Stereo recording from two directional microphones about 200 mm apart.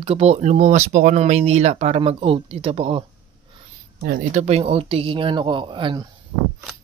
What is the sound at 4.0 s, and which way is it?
Speech, 40° right (ahead or behind).